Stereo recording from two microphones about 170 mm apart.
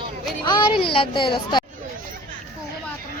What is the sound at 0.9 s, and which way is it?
Speech, 30° left (ahead or behind).